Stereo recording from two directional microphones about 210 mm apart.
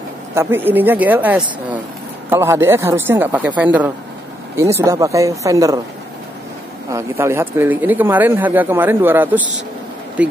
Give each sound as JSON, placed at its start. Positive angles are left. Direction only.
{"t": 0.3, "sound": "speech", "side_deg": -10}
{"t": 6.9, "sound": "speech", "side_deg": -15}